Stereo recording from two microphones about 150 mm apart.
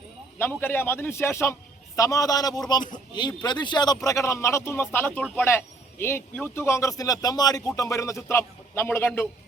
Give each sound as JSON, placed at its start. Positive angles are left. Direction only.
{"t": 0.3, "sound": "speech", "side_deg": 15}